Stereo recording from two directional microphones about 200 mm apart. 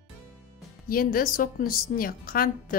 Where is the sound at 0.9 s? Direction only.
45° left (ahead or behind).